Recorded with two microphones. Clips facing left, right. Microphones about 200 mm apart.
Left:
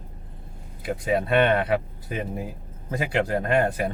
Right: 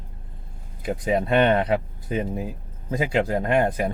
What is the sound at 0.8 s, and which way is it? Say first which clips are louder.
Speech: right 1 dB; 20° right (ahead or behind).